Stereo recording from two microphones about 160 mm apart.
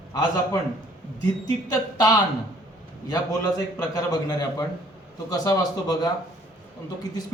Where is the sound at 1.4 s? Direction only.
20° left (ahead or behind).